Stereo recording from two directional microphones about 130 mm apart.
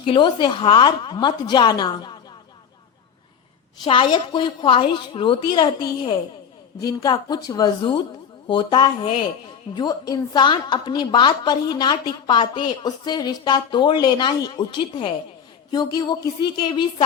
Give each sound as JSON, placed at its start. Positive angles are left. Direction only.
{"t": 0.0, "sound": "a woman's voice", "side_deg": 40}
{"t": 3.8, "sound": "a woman's voice", "side_deg": 40}